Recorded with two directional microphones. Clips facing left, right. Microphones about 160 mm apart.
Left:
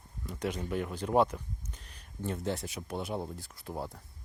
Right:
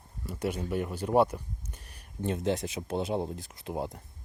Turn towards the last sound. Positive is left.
turn(degrees=-20)  # may be behind; listen again after turning